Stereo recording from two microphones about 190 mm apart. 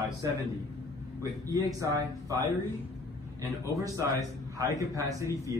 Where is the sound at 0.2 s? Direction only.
20° right (ahead or behind).